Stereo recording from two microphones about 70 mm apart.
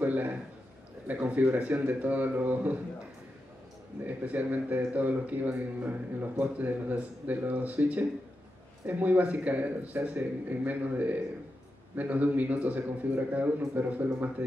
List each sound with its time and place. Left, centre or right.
0.0 s a sound: right
1.0 s speech: right
4.0 s speech: right